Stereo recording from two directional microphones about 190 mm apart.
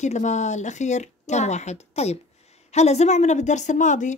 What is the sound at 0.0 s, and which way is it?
A woman's voice, 40° left (ahead or behind).